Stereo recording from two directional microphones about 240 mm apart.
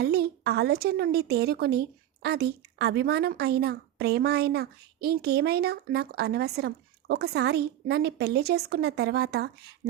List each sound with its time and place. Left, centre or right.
0.0 s a woman's voice: right